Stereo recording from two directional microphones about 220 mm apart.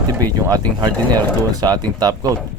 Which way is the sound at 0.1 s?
15° right (ahead or behind).